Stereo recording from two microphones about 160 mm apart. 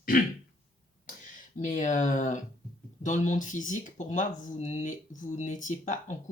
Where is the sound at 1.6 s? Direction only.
50° left (ahead or behind).